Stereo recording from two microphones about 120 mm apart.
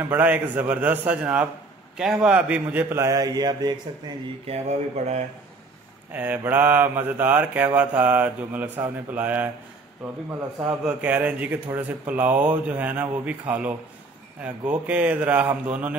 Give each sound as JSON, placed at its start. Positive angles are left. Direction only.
{"t": 0.1, "sound": "mantra", "side_deg": -15}
{"t": 4.5, "sound": "speech", "side_deg": -70}
{"t": 6.1, "sound": "mantra", "side_deg": -15}
{"t": 10.8, "sound": "mantra", "side_deg": -10}